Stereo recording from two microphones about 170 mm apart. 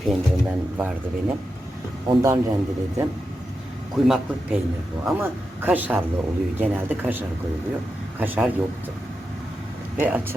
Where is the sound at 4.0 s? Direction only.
Centre (ahead or behind).